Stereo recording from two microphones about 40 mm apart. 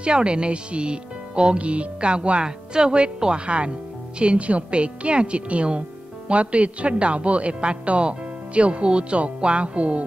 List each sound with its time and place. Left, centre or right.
0.0 s a woman's voice: right